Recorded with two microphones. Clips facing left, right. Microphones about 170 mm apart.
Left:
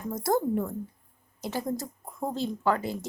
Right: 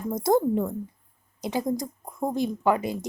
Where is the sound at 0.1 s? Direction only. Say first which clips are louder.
Right 4 dB; 20° right (ahead or behind).